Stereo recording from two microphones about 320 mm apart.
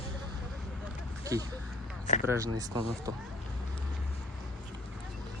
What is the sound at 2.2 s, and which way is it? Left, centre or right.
Speech, centre.